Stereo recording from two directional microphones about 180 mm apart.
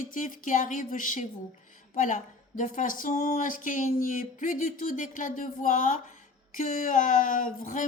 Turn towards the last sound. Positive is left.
turn(degrees=50)  # may be behind; listen again after turning